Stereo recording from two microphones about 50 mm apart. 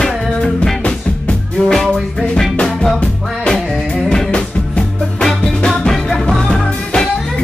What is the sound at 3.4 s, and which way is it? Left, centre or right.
Music, centre.